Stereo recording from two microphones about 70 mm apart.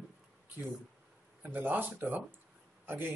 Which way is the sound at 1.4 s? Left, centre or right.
Right.